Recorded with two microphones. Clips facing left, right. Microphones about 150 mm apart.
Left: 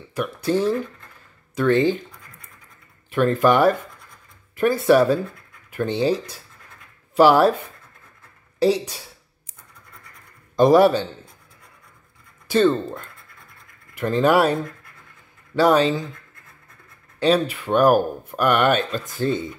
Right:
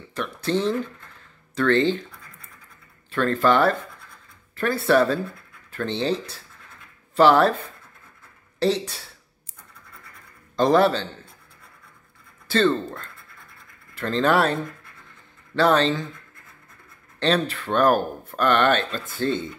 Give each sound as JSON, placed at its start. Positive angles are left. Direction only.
{"t": 0.1, "sound": "speech", "side_deg": 10}
{"t": 3.1, "sound": "speech", "side_deg": 15}
{"t": 8.5, "sound": "speech", "side_deg": 10}
{"t": 10.5, "sound": "a man's voice", "side_deg": 15}
{"t": 12.4, "sound": "speech", "side_deg": 15}
{"t": 17.2, "sound": "speech", "side_deg": 10}